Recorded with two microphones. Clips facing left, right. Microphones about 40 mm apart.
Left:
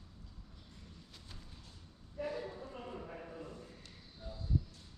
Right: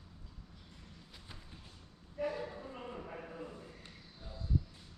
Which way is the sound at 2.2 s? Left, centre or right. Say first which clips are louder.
Right 2 dB; centre.